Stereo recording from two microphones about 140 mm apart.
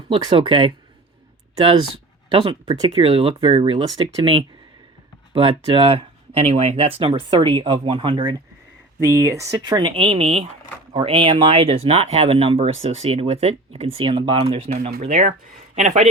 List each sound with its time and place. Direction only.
0.1 s speech: 35° right (ahead or behind)
2.3 s speech: 40° right (ahead or behind)
9.3 s speech: 20° right (ahead or behind); by 14.8 s 45° right (ahead or behind)
15.0 s speech: 60° right (ahead or behind)